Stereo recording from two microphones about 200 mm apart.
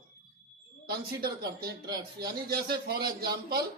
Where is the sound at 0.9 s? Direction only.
50° right (ahead or behind).